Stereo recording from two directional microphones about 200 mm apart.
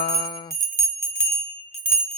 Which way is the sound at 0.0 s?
25° left (ahead or behind).